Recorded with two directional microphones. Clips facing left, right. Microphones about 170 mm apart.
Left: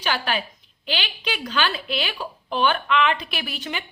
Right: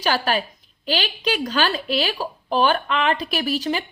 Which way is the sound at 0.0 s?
40° right (ahead or behind).